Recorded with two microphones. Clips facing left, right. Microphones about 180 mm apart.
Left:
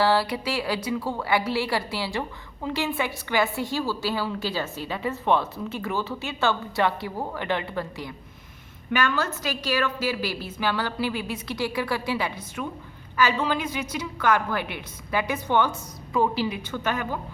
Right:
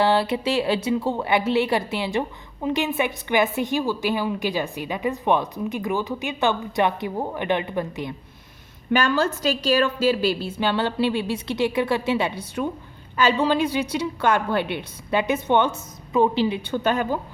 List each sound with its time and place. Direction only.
0.0 s a woman's voice: 20° right (ahead or behind)
8.9 s a woman's voice: 30° right (ahead or behind)